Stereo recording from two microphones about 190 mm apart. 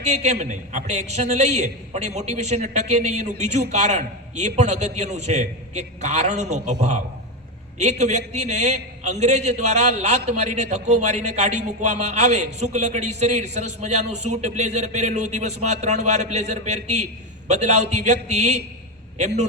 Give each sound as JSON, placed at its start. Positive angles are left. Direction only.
{"t": 0.0, "sound": "a man's voice", "side_deg": -35}